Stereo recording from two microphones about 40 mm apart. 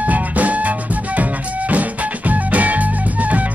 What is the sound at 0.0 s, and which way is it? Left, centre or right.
Music, right.